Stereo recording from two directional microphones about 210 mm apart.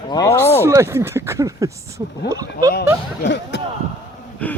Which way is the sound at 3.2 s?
55° left (ahead or behind).